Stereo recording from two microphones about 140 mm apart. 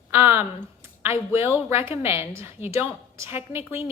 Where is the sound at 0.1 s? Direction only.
15° right (ahead or behind).